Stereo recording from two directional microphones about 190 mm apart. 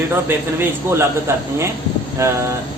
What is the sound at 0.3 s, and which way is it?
Speech, 10° right (ahead or behind).